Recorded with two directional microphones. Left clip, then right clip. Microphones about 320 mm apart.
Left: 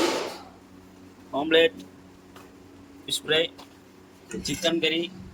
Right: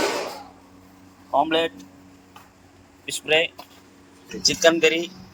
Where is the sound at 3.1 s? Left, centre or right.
Centre.